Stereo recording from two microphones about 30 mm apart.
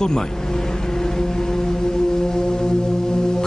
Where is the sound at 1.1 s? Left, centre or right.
Centre.